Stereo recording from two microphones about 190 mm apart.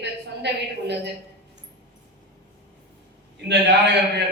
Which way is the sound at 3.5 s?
65° right (ahead or behind).